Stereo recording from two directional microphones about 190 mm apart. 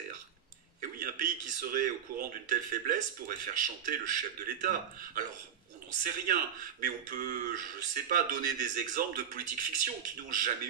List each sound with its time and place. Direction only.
0.7 s a man's voice: 45° right (ahead or behind)